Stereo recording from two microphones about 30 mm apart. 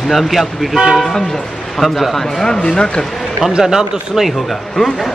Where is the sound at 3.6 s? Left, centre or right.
Centre.